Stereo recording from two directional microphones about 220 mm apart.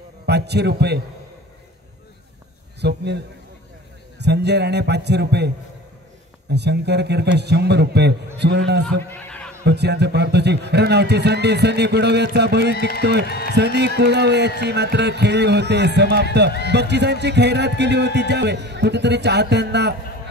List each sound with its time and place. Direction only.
0.3 s a man's voice: 50° right (ahead or behind)
2.8 s a man's voice: 50° right (ahead or behind)
4.2 s a man's voice: 50° right (ahead or behind)
6.5 s a man's voice: 50° right (ahead or behind)